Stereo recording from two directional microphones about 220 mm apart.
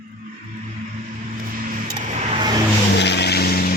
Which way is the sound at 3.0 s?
50° left (ahead or behind).